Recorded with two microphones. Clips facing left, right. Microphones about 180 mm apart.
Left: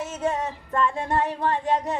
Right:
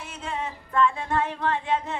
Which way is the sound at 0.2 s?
40° left (ahead or behind).